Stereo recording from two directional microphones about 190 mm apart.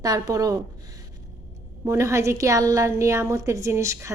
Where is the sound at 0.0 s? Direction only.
20° right (ahead or behind).